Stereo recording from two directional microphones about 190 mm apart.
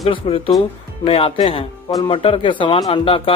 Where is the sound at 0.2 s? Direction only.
30° left (ahead or behind).